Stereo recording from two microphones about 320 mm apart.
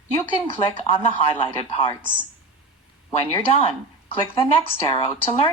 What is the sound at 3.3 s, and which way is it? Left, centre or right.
Speech, centre.